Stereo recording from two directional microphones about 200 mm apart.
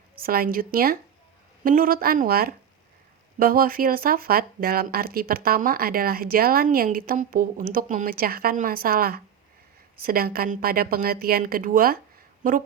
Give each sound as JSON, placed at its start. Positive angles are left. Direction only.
{"t": 0.2, "sound": "a woman's voice", "side_deg": -45}